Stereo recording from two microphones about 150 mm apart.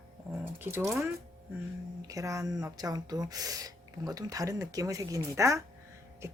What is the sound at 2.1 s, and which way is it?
Speech, 20° right (ahead or behind).